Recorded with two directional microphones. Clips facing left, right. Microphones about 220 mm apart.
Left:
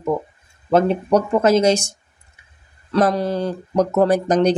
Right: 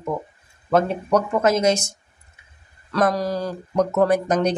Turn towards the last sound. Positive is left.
turn(degrees=35)  # may be behind; listen again after turning